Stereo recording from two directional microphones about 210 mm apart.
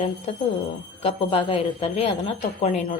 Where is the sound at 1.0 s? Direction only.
25° left (ahead or behind).